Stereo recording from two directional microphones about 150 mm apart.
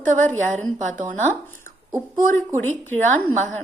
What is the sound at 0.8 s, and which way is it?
Speech, 55° right (ahead or behind).